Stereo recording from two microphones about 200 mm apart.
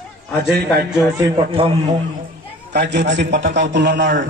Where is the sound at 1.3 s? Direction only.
25° right (ahead or behind).